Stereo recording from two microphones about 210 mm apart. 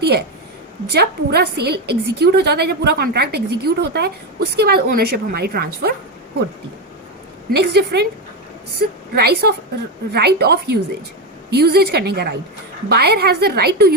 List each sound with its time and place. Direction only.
0.0 s a woman's voice: 50° right (ahead or behind)
7.5 s a woman's voice: 50° right (ahead or behind)